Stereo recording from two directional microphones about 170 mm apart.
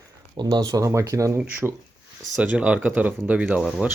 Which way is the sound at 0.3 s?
25° right (ahead or behind).